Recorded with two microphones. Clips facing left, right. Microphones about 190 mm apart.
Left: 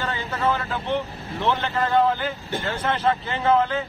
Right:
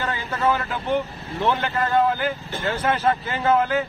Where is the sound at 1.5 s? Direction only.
10° right (ahead or behind).